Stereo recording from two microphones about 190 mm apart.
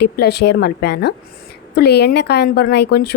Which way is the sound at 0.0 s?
60° left (ahead or behind).